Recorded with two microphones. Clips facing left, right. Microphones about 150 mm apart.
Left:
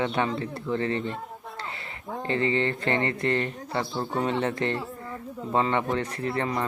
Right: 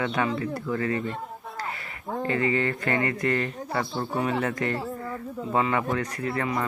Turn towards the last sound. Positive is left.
turn(degrees=30)  # may be behind; listen again after turning